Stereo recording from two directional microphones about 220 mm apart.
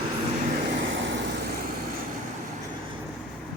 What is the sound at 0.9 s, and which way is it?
Vehicle, 50° right (ahead or behind).